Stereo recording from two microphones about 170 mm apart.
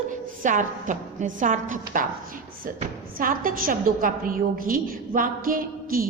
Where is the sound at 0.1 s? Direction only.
50° right (ahead or behind).